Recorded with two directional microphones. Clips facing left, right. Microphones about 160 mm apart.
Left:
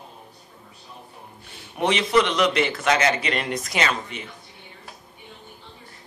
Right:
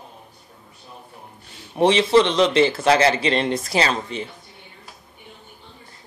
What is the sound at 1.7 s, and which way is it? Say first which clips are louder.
A man's voice: right 5 dB; 30° right (ahead or behind).